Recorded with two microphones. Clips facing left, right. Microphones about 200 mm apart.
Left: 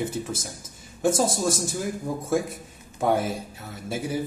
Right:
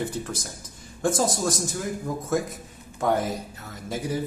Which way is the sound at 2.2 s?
10° left (ahead or behind).